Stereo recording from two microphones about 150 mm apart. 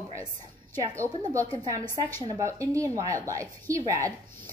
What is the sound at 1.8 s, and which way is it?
Speech, 15° left (ahead or behind).